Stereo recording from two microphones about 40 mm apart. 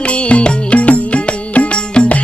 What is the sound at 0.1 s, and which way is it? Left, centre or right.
Music, left.